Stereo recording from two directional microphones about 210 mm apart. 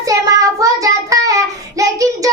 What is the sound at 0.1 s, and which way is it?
Child singing, 15° right (ahead or behind).